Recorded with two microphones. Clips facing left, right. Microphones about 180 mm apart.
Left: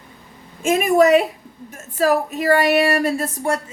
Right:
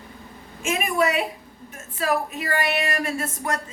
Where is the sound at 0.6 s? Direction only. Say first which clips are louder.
Left 8 dB; 40° left (ahead or behind).